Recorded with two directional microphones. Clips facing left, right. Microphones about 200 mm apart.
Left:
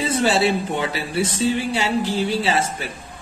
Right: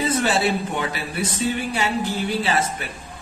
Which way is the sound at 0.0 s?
30° left (ahead or behind).